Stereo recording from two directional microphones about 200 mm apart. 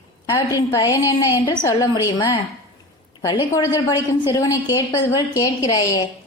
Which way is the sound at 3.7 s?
15° left (ahead or behind).